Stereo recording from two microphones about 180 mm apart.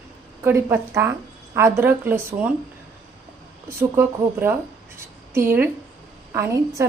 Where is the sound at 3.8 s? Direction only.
10° right (ahead or behind).